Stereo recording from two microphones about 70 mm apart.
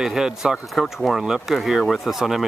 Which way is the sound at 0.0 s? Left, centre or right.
Centre.